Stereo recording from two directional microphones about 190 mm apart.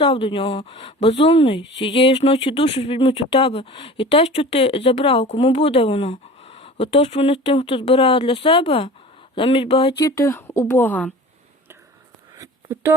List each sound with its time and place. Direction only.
0.0 s speech: 30° left (ahead or behind)
10.1 s a woman's voice: 15° left (ahead or behind)